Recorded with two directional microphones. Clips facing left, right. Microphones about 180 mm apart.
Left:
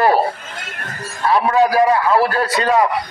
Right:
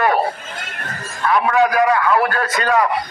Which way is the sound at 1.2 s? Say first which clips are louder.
Left 1 dB; 30° left (ahead or behind).